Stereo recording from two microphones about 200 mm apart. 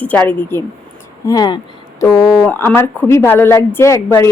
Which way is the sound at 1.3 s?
20° left (ahead or behind).